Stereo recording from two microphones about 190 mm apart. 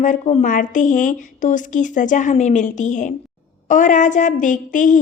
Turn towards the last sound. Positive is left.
turn(degrees=40)  # may be behind; listen again after turning